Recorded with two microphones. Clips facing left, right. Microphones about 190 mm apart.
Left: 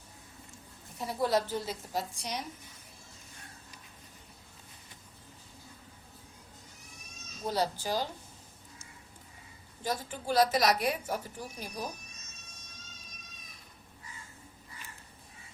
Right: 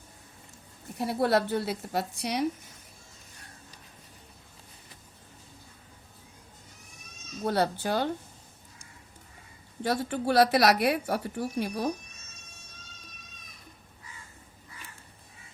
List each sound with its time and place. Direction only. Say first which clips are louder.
0.9 s a woman's voice: right 4 dB; 65° right (ahead or behind)
7.4 s a woman's voice: right 4 dB; 60° right (ahead or behind)
9.8 s a woman's voice: right 7 dB; 70° right (ahead or behind)